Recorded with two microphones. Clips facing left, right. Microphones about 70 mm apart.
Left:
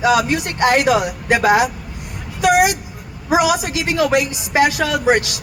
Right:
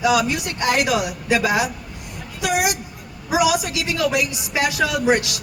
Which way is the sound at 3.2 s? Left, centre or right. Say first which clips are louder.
Left 3 dB; left.